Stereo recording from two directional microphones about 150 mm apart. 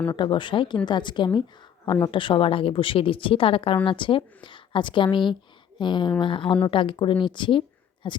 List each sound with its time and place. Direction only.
0.1 s a woman's voice: 30° left (ahead or behind)